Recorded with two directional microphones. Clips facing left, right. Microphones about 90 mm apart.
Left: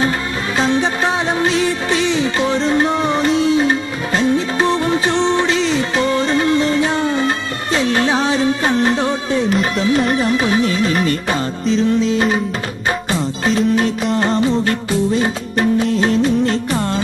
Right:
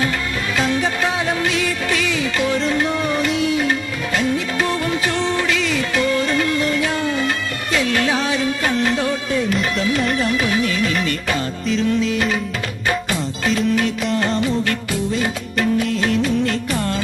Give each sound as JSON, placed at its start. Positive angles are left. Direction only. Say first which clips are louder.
{"t": 0.6, "sound": "music", "louder": "left 3 dB", "side_deg": 30}